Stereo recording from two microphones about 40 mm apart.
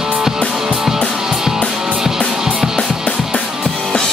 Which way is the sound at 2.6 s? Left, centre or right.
Centre.